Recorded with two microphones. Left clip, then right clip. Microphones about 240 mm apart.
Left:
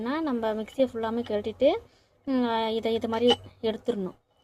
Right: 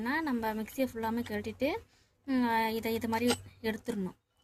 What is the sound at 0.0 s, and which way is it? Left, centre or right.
A woman's voice, right.